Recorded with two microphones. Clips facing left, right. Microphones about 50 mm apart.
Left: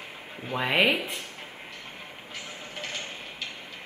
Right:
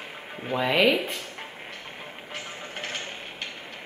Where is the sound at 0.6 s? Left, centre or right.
Centre.